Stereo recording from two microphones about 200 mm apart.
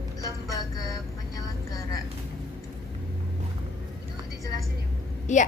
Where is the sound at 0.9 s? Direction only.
15° left (ahead or behind).